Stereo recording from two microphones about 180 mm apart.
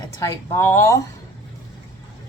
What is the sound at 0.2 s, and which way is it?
Speech, 15° left (ahead or behind).